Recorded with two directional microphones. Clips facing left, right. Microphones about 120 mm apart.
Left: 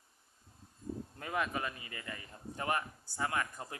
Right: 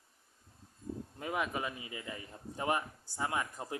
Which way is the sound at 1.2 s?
10° right (ahead or behind).